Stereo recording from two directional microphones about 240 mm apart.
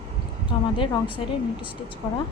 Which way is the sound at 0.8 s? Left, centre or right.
Left.